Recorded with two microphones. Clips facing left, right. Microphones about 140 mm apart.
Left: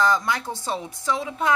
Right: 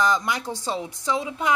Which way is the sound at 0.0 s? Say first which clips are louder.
Left 1 dB; 15° right (ahead or behind).